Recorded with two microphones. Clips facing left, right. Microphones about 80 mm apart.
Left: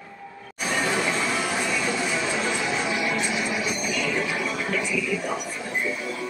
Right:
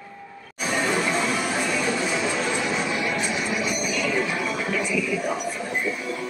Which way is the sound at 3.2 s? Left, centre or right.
Centre.